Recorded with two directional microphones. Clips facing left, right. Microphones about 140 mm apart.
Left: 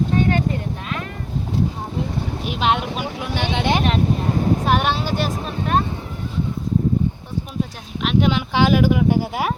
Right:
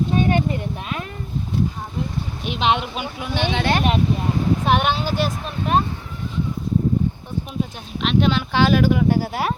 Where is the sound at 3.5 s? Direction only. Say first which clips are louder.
Left 2 dB; 15° left (ahead or behind).